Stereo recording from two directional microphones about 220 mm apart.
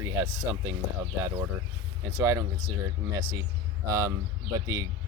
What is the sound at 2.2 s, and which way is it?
Speech, 10° right (ahead or behind).